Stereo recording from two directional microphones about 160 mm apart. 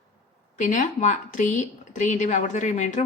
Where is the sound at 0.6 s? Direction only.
50° left (ahead or behind).